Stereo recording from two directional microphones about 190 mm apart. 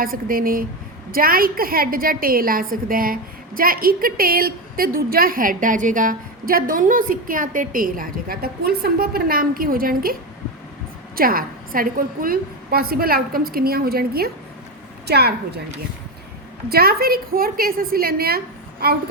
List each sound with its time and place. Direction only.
0.0 s a woman's voice: 50° right (ahead or behind)
16.6 s a woman's voice: 55° right (ahead or behind)